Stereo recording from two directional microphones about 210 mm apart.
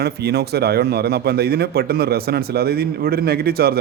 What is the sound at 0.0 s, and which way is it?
A man's voice, 50° right (ahead or behind).